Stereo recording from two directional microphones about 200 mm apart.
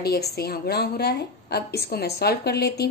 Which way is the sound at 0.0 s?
50° left (ahead or behind).